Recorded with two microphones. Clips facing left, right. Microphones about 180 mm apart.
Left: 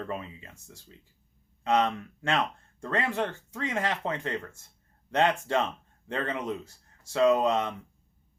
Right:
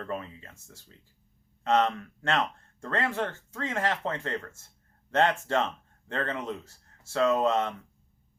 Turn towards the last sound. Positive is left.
turn(degrees=15)  # may be behind; listen again after turning